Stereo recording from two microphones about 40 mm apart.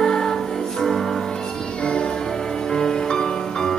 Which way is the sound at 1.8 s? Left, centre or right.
Left.